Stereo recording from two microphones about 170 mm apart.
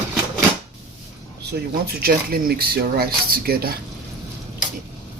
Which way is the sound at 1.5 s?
65° right (ahead or behind).